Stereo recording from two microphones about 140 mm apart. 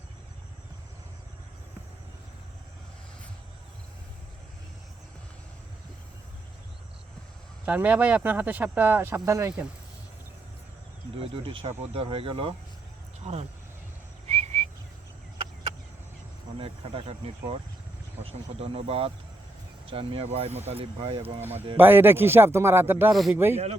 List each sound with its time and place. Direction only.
7.6 s speech: 10° right (ahead or behind)
11.2 s speech: 40° right (ahead or behind)
13.2 s speech: 50° right (ahead or behind)
14.3 s whistling: 50° right (ahead or behind)
16.6 s speech: 40° right (ahead or behind)
21.8 s speech: 15° right (ahead or behind)
23.1 s speech: centre (ahead or behind)